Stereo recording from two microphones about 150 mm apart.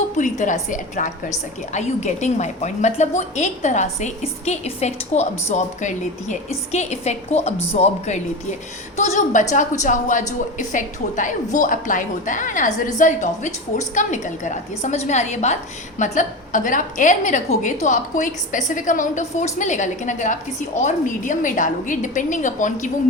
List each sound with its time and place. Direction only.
0.2 s a woman's voice: 55° left (ahead or behind)